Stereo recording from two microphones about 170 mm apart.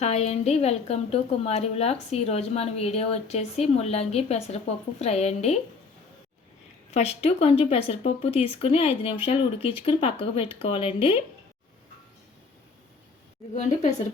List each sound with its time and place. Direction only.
0.0 s a woman's voice: 40° left (ahead or behind)
6.9 s a woman's voice: 40° left (ahead or behind)
13.5 s a woman's voice: 45° left (ahead or behind)